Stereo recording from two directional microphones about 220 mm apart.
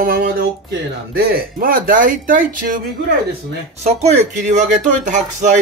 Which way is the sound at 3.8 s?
30° right (ahead or behind).